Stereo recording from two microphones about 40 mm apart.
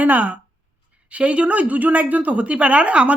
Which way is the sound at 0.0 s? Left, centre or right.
Right.